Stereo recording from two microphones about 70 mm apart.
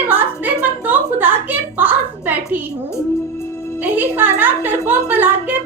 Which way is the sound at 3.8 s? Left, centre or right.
Right.